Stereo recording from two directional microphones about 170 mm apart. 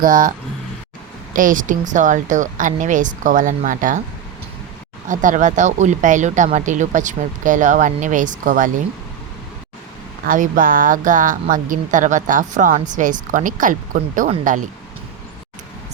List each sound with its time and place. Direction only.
0.0 s speech: 55° right (ahead or behind)
1.4 s speech: 50° right (ahead or behind)
5.0 s speech: 50° right (ahead or behind)
10.2 s speech: 50° right (ahead or behind)